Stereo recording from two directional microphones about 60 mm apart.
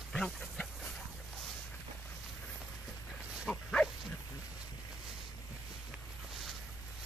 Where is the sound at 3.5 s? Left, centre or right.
Centre.